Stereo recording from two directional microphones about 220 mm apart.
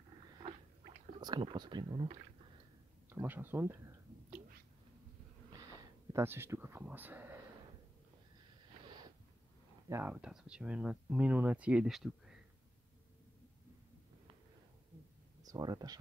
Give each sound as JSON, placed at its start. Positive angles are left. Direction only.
{"t": 1.2, "sound": "speech", "side_deg": -20}
{"t": 3.1, "sound": "speech", "side_deg": -10}
{"t": 6.1, "sound": "speech", "side_deg": -10}
{"t": 9.8, "sound": "speech", "side_deg": -10}
{"t": 15.4, "sound": "speech", "side_deg": -15}